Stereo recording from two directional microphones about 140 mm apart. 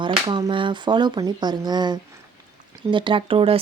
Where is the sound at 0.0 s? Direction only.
35° right (ahead or behind).